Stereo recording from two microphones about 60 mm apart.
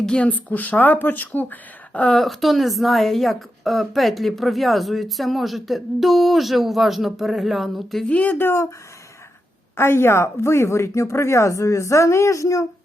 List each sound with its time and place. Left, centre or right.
0.0 s speech: centre
0.3 s speech: left
1.9 s a woman's voice: centre
2.2 s a woman's voice: centre
8.1 s speech: left
9.7 s speech: left